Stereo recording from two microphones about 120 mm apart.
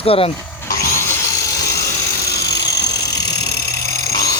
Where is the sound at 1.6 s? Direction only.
25° left (ahead or behind).